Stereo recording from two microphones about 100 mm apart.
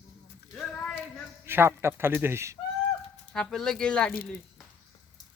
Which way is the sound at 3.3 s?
5° left (ahead or behind).